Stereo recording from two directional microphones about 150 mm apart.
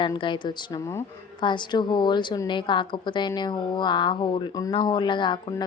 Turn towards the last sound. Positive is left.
turn(degrees=30)  # may be behind; listen again after turning